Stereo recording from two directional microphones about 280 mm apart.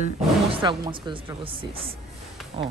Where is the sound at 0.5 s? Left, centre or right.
Centre.